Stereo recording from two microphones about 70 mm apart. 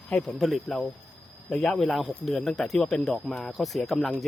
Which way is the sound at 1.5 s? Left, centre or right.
Centre.